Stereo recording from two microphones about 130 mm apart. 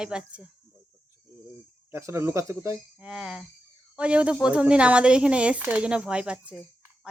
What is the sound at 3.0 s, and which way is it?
Speech, 5° right (ahead or behind).